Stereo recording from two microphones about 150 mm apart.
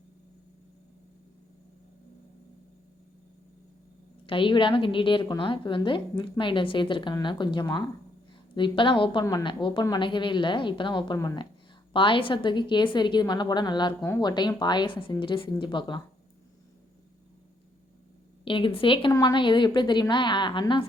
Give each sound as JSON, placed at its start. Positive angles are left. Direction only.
{"t": 4.3, "sound": "a woman's voice", "side_deg": 35}
{"t": 18.4, "sound": "a woman's voice", "side_deg": 35}